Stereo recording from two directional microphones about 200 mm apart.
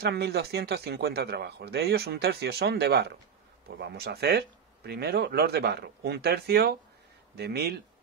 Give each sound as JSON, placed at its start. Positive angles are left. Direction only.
{"t": 0.0, "sound": "speech", "side_deg": -55}